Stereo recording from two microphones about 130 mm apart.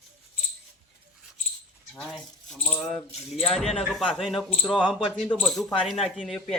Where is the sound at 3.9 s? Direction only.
Centre (ahead or behind).